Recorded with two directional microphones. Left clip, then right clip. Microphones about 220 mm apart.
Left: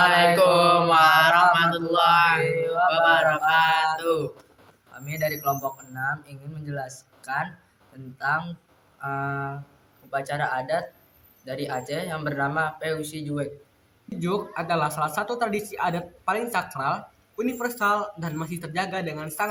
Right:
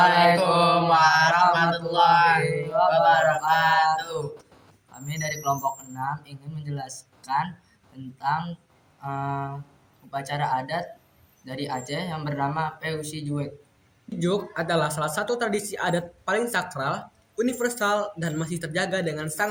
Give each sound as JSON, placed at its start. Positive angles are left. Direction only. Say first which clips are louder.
{"t": 0.3, "sound": "mantra", "louder": "left 3 dB", "side_deg": 25}
{"t": 5.0, "sound": "a man's voice", "louder": "left 1 dB", "side_deg": 10}
{"t": 14.2, "sound": "speech", "louder": "right 1 dB", "side_deg": -10}